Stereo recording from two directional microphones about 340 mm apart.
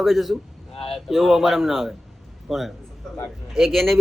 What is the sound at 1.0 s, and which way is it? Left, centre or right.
A man's voice, centre.